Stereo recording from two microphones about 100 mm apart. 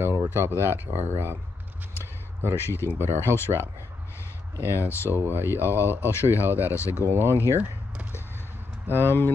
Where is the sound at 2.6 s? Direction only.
25° left (ahead or behind).